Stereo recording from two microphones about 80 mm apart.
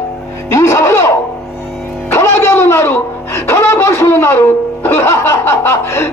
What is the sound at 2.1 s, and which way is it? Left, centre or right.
Speech, left.